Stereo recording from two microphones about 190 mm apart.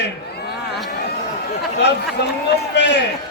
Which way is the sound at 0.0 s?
55° left (ahead or behind).